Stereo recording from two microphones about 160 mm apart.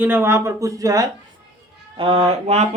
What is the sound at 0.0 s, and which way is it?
Speech, 15° right (ahead or behind).